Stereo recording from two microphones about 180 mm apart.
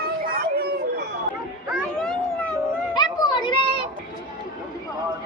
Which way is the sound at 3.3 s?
25° left (ahead or behind).